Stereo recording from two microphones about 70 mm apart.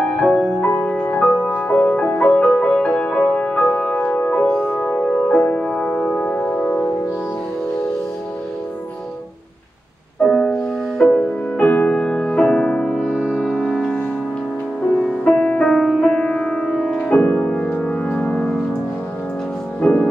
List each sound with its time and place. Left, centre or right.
0.0 s music: centre
0.6 s music: left; by 4.2 s centre
4.2 s music: centre
6.2 s music: left
10.2 s music: centre
11.6 s music: left
11.9 s music: centre
13.0 s music: centre
13.4 s music: centre
15.3 s music: centre; by 17.4 s left
17.4 s music: centre
17.7 s music: centre
18.0 s music: centre
19.8 s music: centre